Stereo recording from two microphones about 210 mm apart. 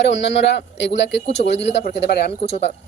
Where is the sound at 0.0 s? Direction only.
55° left (ahead or behind).